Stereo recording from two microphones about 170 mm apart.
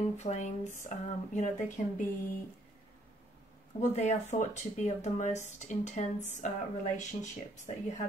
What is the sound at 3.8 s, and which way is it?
Speech, 45° left (ahead or behind).